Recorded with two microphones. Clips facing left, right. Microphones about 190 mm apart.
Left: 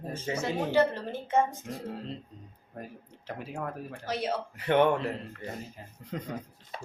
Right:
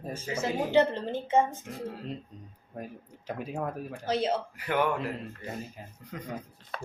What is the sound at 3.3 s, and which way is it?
Speech, 15° right (ahead or behind).